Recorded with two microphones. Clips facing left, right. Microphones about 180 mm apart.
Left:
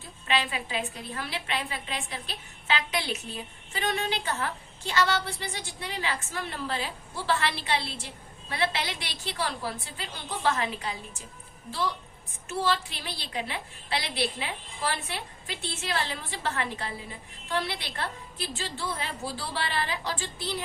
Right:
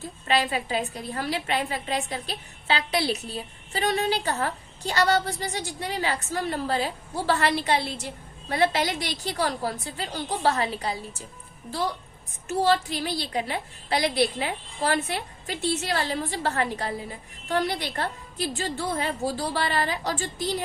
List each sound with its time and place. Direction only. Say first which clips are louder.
0.3 s a woman's voice: right 5 dB; 40° right (ahead or behind)
12.5 s a woman's voice: right 6 dB; 40° right (ahead or behind)